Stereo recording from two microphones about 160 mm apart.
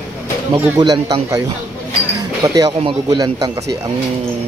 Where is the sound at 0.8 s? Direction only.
25° right (ahead or behind).